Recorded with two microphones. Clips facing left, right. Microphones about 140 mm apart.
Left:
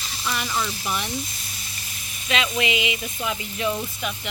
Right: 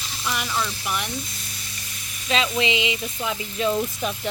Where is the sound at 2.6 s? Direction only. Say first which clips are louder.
Right 1 dB; 25° right (ahead or behind).